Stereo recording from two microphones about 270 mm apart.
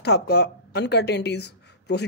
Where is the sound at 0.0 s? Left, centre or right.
Left.